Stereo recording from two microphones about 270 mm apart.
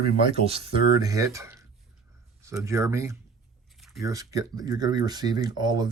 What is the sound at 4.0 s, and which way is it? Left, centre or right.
Speech, centre.